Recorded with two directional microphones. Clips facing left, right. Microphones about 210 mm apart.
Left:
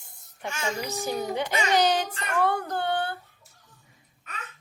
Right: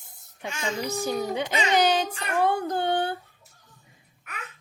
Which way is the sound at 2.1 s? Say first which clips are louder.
Right 1 dB; 15° right (ahead or behind).